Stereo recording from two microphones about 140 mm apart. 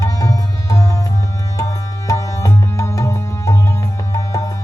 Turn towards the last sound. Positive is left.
turn(degrees=25)  # may be behind; listen again after turning